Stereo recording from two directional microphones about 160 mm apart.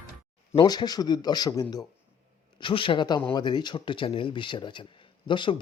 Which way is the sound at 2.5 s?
30° left (ahead or behind).